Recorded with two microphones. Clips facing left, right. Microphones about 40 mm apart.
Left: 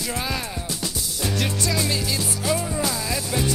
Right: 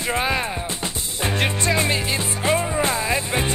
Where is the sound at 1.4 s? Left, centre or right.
Right.